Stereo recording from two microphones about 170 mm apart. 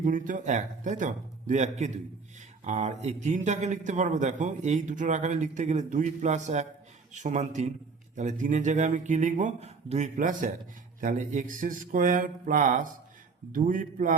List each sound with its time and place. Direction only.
0.0 s a man's voice: 50° right (ahead or behind)